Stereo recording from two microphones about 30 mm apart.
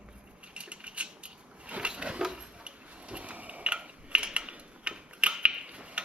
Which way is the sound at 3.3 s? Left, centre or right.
Right.